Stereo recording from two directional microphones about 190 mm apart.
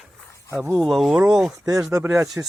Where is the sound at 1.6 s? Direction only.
15° right (ahead or behind).